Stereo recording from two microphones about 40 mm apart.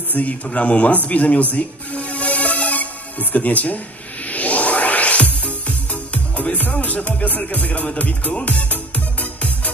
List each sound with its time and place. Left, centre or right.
0.1 s a man's voice: left
1.0 s music: left